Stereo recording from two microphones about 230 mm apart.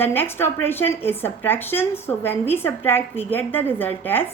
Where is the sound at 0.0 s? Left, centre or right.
Centre.